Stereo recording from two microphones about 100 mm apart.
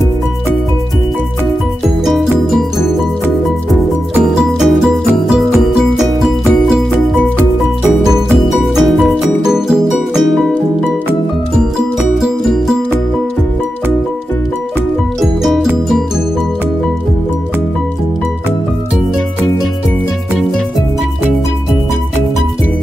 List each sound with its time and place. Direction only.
4.3 s music: 5° right (ahead or behind)
8.3 s music: 5° right (ahead or behind)
12.2 s music: 5° right (ahead or behind)